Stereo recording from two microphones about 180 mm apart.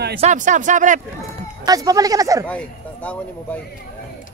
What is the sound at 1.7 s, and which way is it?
Speech, 20° right (ahead or behind).